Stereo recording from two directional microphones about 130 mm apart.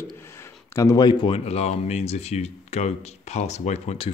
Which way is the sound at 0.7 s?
25° left (ahead or behind).